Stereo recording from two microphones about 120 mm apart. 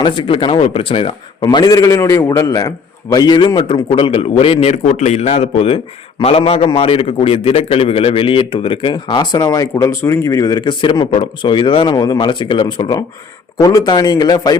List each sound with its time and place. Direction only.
0.0 s a man's voice: 45° left (ahead or behind)
4.9 s a man's voice: 75° left (ahead or behind); by 9.4 s 40° left (ahead or behind)
9.4 s a man's voice: 30° left (ahead or behind)